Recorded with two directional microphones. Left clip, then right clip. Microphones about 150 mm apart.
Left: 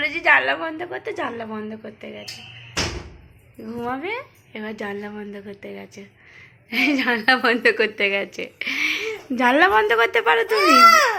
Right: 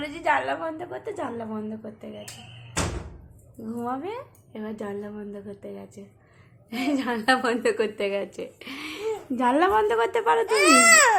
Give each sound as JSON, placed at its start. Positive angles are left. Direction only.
{"t": 0.0, "sound": "a woman's voice", "side_deg": 0}
{"t": 2.8, "sound": "door", "side_deg": 0}
{"t": 3.7, "sound": "a woman's voice", "side_deg": -5}
{"t": 10.1, "sound": "speech", "side_deg": -15}